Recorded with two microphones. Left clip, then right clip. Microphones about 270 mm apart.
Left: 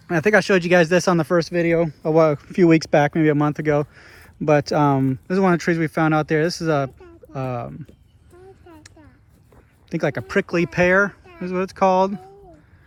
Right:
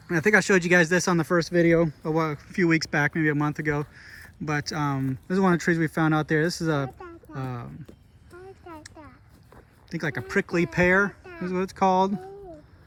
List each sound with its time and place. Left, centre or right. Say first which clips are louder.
0.1 s speech: left 4 dB; centre
8.3 s a sound: right 1 dB; centre
9.9 s speech: left 6 dB; centre